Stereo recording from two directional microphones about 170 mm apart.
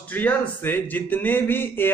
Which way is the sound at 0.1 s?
10° left (ahead or behind).